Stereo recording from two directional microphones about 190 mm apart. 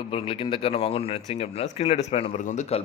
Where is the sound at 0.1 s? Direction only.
30° left (ahead or behind).